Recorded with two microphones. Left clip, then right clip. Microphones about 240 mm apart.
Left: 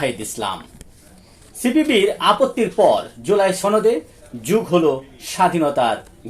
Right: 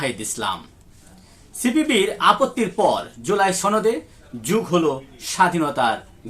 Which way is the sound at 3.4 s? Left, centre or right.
Right.